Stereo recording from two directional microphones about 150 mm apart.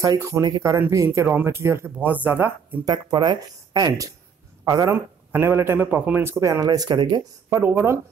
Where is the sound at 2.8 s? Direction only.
30° right (ahead or behind).